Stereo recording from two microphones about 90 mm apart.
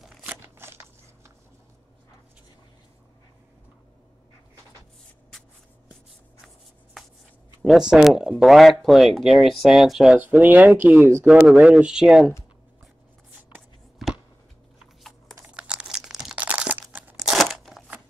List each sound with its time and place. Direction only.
0.2 s crackle: 20° right (ahead or behind)
6.4 s shuffle: centre (ahead or behind)
7.6 s speech: 5° right (ahead or behind)
10.1 s speech: 20° right (ahead or behind)
13.9 s a sound: 5° right (ahead or behind)
15.4 s crumpling: 15° right (ahead or behind)
17.2 s a sound: centre (ahead or behind)